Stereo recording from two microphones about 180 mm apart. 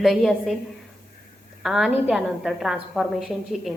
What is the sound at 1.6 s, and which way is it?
A woman's voice, centre (ahead or behind).